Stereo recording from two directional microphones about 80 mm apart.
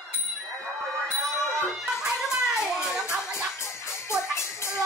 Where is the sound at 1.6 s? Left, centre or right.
Centre.